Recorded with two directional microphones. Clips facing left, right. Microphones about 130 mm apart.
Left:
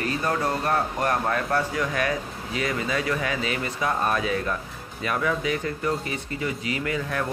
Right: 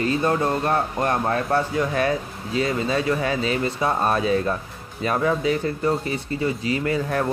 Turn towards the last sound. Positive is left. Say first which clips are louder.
# right 5 dB
turn(degrees=-35)  # may be behind; listen again after turning